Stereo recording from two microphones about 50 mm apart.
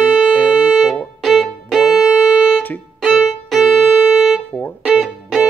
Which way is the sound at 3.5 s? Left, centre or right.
Centre.